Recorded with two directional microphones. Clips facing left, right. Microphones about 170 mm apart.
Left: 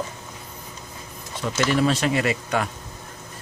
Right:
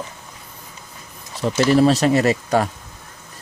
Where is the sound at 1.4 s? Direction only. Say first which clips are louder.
Right 6 dB; 35° right (ahead or behind).